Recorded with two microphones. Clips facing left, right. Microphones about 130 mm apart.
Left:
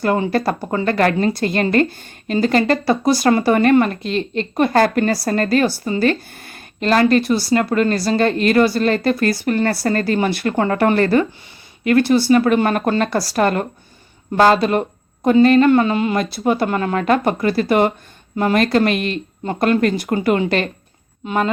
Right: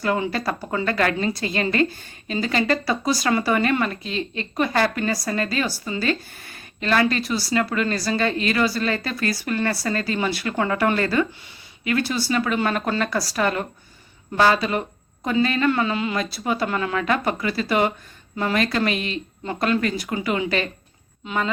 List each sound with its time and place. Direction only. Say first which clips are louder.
0.0 s speech: left 6 dB; 45° left (ahead or behind)
0.7 s speech: left 5 dB; 40° left (ahead or behind)
1.3 s speech: left 6 dB; 60° left (ahead or behind)
3.0 s speech: left 7 dB; 60° left (ahead or behind)
3.2 s speech: left 7 dB; 40° left (ahead or behind); by 5.8 s 60° left (ahead or behind)
6.0 s a sound: left 7 dB; 55° left (ahead or behind)
6.9 s speech: left 7 dB; 50° left (ahead or behind)
10.5 s speech: left 3 dB; 35° left (ahead or behind)
10.8 s speech: left 6 dB; 50° left (ahead or behind)
19.5 s speech: left 6 dB; 45° left (ahead or behind)